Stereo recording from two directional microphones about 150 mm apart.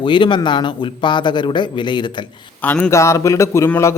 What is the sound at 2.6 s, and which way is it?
A man's voice, 10° left (ahead or behind).